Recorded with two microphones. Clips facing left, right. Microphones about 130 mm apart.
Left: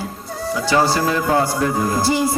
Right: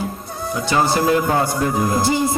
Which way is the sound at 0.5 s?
20° right (ahead or behind).